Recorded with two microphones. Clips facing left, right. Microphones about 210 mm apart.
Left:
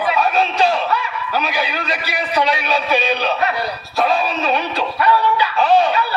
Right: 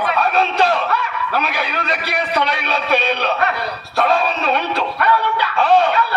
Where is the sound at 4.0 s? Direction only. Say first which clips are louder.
Right 1 dB; 60° right (ahead or behind).